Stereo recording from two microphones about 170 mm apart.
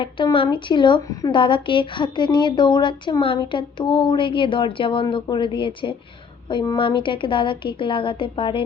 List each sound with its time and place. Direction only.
0.0 s a woman's voice: 30° left (ahead or behind)